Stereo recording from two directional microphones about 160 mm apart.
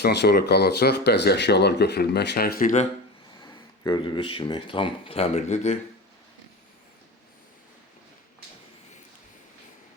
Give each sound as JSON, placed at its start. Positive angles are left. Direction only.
{"t": 0.0, "sound": "speech", "side_deg": 90}
{"t": 3.4, "sound": "speech", "side_deg": 30}